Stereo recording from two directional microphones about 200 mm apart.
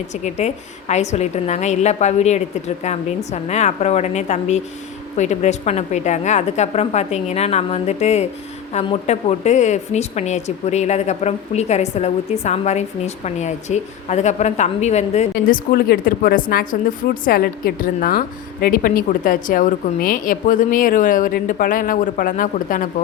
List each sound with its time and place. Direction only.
0.1 s a woman's voice: 35° left (ahead or behind)